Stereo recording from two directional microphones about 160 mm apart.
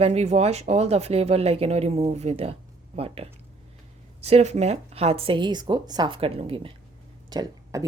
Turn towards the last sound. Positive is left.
turn(degrees=-25)  # may be behind; listen again after turning